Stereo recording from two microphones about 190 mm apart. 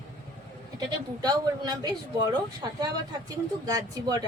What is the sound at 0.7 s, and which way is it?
A woman's voice, 20° right (ahead or behind).